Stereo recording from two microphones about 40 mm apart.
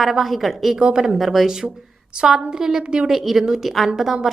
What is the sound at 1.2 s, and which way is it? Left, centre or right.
A woman's voice, centre.